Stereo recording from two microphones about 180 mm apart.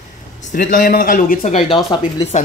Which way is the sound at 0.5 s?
50° left (ahead or behind).